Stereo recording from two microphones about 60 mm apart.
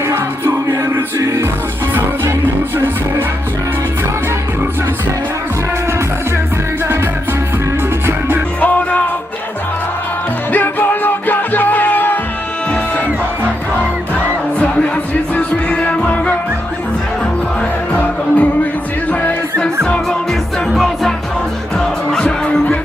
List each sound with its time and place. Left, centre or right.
8.6 s music: left
10.5 s music: left
15.4 s music: centre
17.9 s music: left
19.5 s music: centre
20.7 s music: centre
21.8 s music: centre